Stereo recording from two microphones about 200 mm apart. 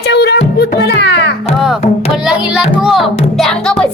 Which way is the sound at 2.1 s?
Centre (ahead or behind).